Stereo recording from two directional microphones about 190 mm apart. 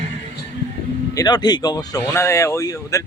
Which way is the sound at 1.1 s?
20° left (ahead or behind).